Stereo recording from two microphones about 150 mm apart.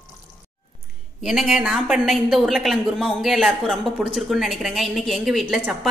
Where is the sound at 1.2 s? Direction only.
5° right (ahead or behind).